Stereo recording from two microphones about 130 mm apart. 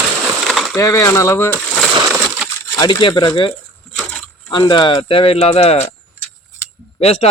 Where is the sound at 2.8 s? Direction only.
35° left (ahead or behind).